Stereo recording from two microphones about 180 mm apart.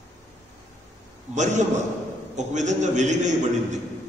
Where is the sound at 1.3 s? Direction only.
40° right (ahead or behind).